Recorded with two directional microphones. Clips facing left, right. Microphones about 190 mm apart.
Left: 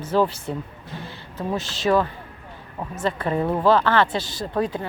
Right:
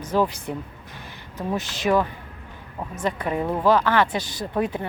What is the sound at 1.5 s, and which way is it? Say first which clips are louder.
Speech: left 1 dB; 15° right (ahead or behind).